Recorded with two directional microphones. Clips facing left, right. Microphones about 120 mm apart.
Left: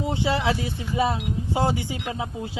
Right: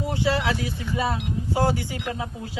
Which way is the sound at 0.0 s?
20° left (ahead or behind).